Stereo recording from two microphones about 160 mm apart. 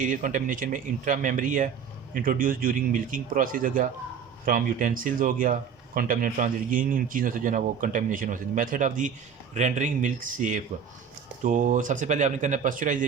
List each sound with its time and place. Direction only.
0.0 s speech: 55° right (ahead or behind)